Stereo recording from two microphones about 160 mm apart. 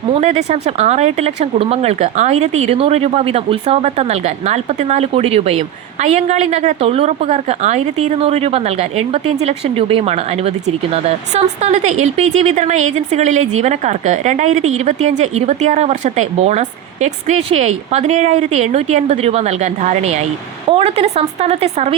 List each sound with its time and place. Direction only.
0.1 s a woman's voice: 45° right (ahead or behind)